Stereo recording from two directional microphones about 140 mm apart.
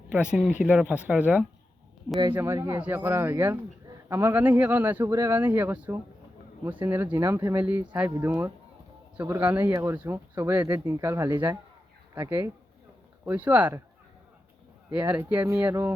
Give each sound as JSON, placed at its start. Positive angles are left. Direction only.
{"t": 0.1, "sound": "speech", "side_deg": -5}
{"t": 14.9, "sound": "speech", "side_deg": -10}